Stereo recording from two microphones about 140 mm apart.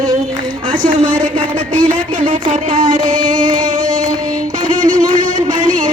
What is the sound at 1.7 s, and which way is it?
Music, 70° right (ahead or behind).